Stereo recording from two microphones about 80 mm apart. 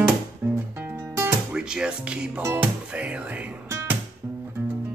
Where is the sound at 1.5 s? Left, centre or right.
Centre.